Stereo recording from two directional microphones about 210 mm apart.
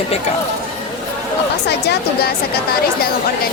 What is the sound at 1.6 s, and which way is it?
Speech, 50° left (ahead or behind).